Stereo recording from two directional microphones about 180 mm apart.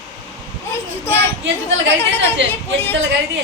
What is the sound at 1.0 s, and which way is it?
Speech, 15° left (ahead or behind).